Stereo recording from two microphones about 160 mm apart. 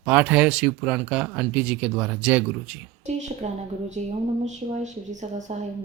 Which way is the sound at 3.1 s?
45° right (ahead or behind).